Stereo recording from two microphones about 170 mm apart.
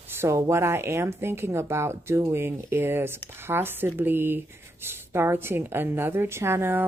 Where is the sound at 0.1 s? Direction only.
15° right (ahead or behind).